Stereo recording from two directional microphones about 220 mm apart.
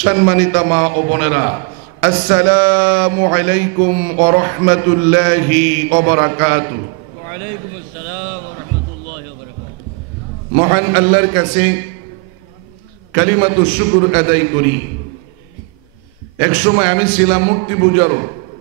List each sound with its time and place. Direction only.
0.0 s a man's voice: 15° right (ahead or behind)
2.1 s a sound: 20° right (ahead or behind)
2.4 s a man's voice: 10° right (ahead or behind)
10.5 s a man's voice: 15° right (ahead or behind)
13.1 s a man's voice: 15° right (ahead or behind)
16.3 s a man's voice: 15° right (ahead or behind)